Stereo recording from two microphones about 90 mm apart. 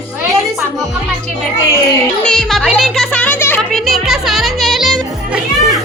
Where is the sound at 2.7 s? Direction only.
Centre (ahead or behind).